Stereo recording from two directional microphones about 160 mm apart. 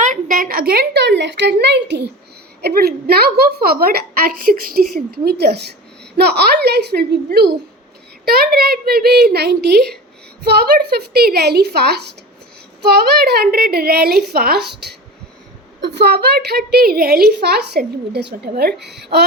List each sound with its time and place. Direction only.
0.0 s a woman's voice: 55° right (ahead or behind); by 7.6 s 90° right
8.2 s a child's voice: 75° right (ahead or behind)
15.9 s a woman's voice: 90° right